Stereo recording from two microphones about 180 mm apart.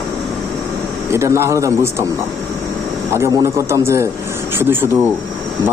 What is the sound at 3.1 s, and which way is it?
Speech, 15° right (ahead or behind).